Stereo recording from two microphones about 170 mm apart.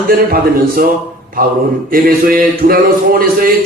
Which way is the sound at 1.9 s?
55° right (ahead or behind).